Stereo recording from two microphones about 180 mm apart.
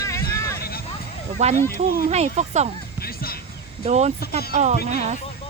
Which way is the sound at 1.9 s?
40° right (ahead or behind).